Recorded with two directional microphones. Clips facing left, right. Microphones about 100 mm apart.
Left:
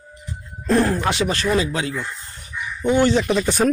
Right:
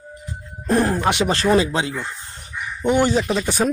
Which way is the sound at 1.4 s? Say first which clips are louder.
Right 3 dB; 35° right (ahead or behind).